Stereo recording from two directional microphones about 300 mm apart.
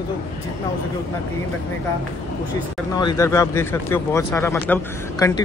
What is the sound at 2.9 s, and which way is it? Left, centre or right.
Speech, centre.